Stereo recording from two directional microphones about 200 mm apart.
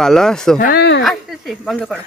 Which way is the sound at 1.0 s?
Centre (ahead or behind).